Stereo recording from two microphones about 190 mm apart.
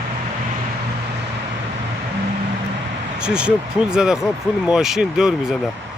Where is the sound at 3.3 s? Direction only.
5° right (ahead or behind).